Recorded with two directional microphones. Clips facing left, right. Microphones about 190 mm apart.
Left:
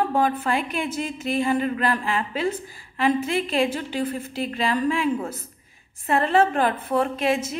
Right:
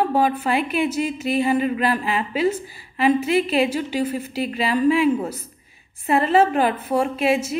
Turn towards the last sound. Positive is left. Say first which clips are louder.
# right 3 dB
turn(degrees=-5)  # may be behind; listen again after turning